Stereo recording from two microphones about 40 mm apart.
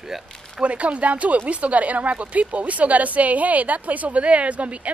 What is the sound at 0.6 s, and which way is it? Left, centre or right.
Speech, right.